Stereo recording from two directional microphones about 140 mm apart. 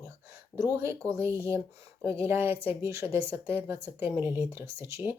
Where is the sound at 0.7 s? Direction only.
20° right (ahead or behind).